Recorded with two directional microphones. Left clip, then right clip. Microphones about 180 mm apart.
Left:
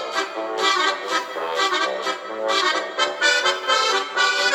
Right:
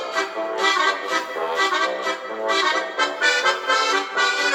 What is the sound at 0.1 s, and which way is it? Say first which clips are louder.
Music: right 2 dB; 60° left (ahead or behind).